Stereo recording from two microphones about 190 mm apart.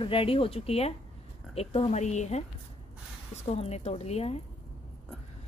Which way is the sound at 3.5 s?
35° left (ahead or behind).